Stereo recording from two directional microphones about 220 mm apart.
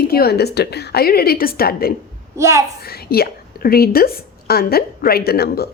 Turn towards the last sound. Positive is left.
turn(degrees=45)  # may be behind; listen again after turning